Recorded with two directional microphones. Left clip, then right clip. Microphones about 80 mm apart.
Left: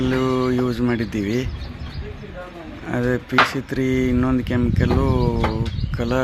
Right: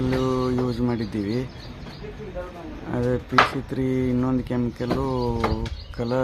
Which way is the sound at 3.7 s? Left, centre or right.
Left.